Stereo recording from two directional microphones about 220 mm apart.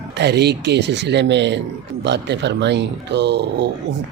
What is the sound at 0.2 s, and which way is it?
Speech, 50° right (ahead or behind).